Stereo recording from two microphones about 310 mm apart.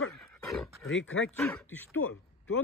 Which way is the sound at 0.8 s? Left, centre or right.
Left.